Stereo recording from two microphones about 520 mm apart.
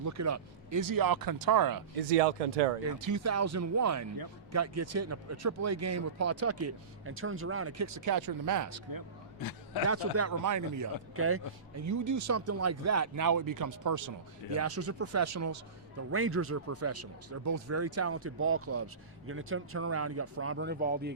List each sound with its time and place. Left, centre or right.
0.0 s speech: right
2.0 s speech: right
2.9 s speech: right
9.4 s a man's voice: left
9.9 s speech: right